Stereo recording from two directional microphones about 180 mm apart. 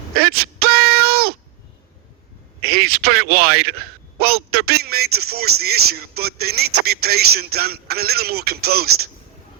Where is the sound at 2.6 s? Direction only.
60° right (ahead or behind).